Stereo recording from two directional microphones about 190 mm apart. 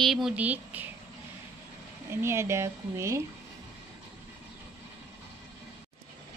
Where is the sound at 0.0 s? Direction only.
Centre (ahead or behind).